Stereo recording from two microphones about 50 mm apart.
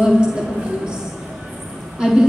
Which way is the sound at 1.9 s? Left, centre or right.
Centre.